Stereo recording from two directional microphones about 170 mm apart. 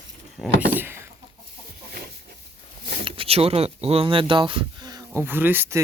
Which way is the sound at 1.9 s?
65° right (ahead or behind).